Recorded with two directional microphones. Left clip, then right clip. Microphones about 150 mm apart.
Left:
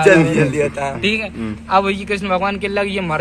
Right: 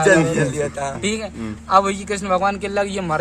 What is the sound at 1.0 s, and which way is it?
A man's voice, 40° right (ahead or behind).